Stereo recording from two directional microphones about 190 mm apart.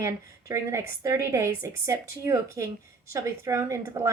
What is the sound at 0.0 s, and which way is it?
Speech, 15° right (ahead or behind).